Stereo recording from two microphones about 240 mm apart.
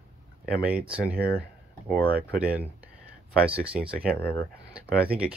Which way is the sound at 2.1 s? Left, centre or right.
Right.